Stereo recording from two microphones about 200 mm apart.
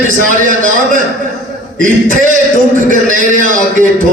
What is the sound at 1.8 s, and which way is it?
A man's voice, 40° right (ahead or behind).